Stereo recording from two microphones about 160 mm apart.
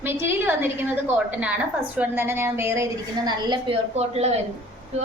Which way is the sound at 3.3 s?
25° right (ahead or behind).